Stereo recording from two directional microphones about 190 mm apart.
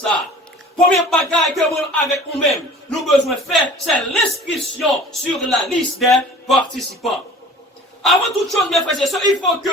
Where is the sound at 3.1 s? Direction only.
Centre (ahead or behind).